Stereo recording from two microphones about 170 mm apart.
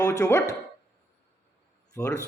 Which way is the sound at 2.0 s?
20° left (ahead or behind).